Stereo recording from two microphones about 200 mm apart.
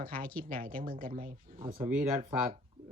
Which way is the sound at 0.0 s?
45° right (ahead or behind).